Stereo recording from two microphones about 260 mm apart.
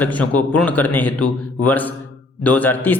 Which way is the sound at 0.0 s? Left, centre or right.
Centre.